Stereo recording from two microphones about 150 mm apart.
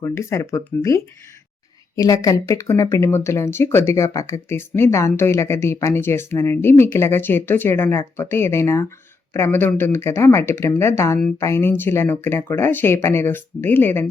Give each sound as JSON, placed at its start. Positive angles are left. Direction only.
{"t": 0.0, "sound": "speech", "side_deg": 20}